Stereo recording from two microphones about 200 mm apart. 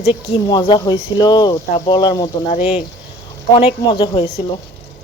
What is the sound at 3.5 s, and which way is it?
Speech, 25° left (ahead or behind).